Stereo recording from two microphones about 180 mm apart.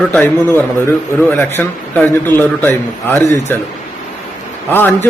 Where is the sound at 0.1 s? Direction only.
10° left (ahead or behind).